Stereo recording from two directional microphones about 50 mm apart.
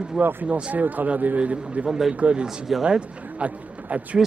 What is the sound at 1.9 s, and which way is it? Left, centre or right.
Speech, centre.